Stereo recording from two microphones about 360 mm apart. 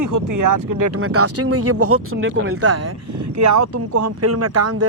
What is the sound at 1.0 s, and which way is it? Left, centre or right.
Speech, right.